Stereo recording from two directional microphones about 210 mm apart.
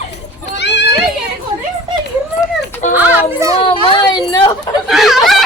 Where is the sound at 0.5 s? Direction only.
55° left (ahead or behind).